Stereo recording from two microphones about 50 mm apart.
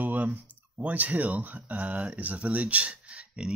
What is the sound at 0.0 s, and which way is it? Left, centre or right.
Speech, right.